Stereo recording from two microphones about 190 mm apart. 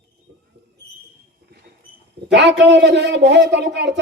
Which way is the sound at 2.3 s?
65° right (ahead or behind).